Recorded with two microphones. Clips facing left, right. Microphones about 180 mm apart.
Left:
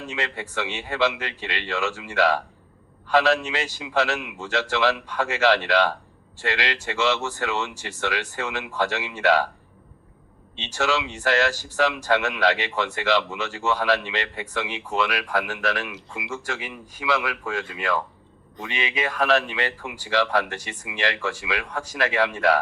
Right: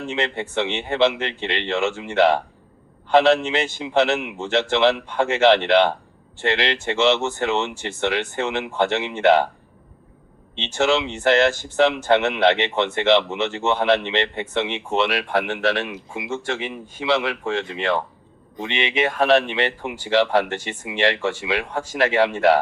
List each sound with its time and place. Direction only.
0.0 s speech: 25° right (ahead or behind)
10.5 s speech: 25° right (ahead or behind)